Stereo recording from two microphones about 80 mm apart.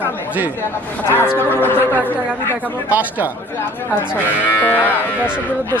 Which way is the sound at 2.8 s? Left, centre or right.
Right.